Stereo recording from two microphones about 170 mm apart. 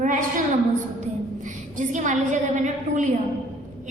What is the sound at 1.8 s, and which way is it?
A woman's voice, 45° right (ahead or behind).